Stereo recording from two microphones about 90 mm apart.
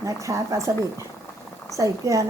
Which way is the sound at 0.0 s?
35° right (ahead or behind).